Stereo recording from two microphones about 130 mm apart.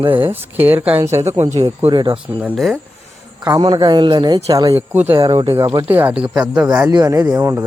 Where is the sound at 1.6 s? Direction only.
35° right (ahead or behind).